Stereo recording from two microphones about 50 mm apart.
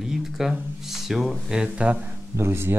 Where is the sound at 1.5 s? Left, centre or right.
Right.